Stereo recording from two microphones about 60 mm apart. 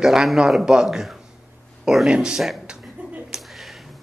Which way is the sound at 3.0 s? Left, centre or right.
Centre.